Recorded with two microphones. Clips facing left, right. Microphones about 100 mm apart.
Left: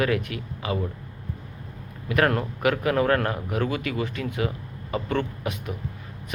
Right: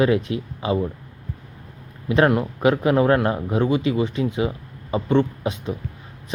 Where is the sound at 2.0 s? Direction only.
20° right (ahead or behind).